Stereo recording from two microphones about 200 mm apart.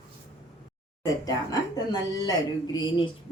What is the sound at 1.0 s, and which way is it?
A woman's voice, 15° left (ahead or behind).